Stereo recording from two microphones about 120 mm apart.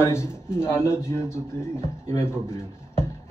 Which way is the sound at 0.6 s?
20° left (ahead or behind).